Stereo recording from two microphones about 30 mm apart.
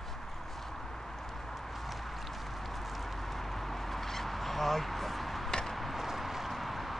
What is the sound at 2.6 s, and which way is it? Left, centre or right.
Fowl, centre.